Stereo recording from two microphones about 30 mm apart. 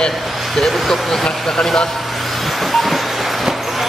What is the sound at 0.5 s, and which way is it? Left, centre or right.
Speech, centre.